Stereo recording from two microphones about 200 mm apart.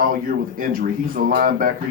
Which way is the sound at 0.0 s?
45° right (ahead or behind).